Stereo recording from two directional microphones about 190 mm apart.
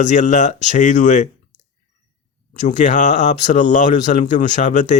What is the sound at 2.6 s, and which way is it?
Speech, 40° left (ahead or behind).